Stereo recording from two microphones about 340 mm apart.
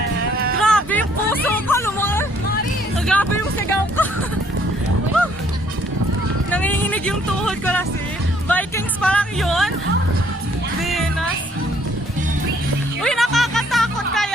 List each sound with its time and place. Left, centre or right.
0.3 s a sound: right
0.6 s music: centre
6.5 s speech: centre
10.8 s music: centre
13.0 s music: centre